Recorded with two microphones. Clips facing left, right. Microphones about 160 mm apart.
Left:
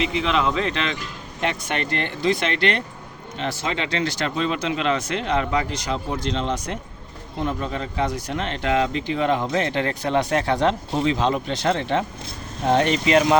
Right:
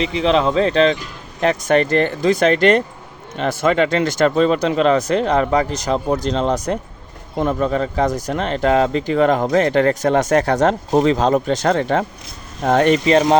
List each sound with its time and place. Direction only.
0.0 s speech: 35° right (ahead or behind); by 13.0 s 50° right (ahead or behind)
13.1 s speech: 35° right (ahead or behind)